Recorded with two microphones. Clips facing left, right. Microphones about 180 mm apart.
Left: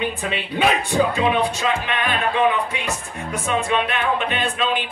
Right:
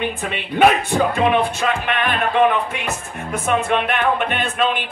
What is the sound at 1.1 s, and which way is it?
Music, 55° right (ahead or behind).